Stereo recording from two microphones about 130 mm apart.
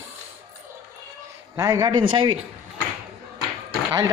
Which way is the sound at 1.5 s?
25° right (ahead or behind).